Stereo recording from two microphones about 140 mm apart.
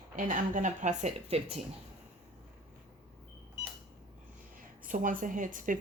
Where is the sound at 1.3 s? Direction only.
45° right (ahead or behind).